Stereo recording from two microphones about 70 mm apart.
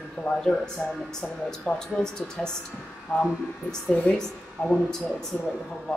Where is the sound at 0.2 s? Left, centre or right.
Centre.